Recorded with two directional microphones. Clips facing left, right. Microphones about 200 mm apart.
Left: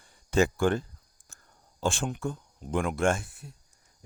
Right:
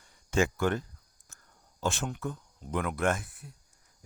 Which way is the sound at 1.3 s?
30° left (ahead or behind).